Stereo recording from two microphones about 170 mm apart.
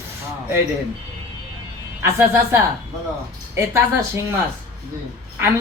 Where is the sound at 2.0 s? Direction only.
15° right (ahead or behind).